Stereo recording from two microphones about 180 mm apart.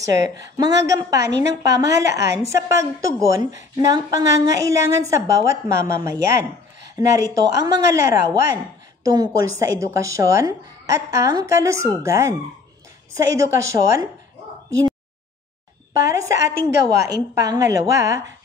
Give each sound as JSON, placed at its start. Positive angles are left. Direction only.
{"t": 0.8, "sound": "speech", "side_deg": -20}
{"t": 1.3, "sound": "a woman's voice", "side_deg": -75}
{"t": 1.8, "sound": "a woman's voice", "side_deg": -20}
{"t": 15.9, "sound": "a woman's voice", "side_deg": -20}